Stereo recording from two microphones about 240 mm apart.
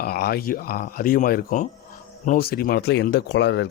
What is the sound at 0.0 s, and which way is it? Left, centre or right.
Speech, left.